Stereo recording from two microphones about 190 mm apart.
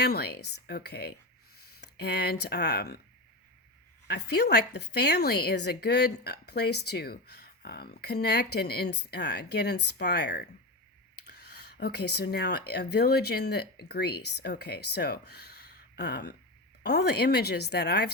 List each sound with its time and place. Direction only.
0.0 s speech: 55° left (ahead or behind)
4.0 s speech: 60° left (ahead or behind)